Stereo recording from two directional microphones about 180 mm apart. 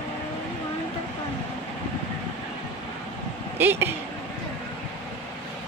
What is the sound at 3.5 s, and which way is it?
Speech, 10° right (ahead or behind).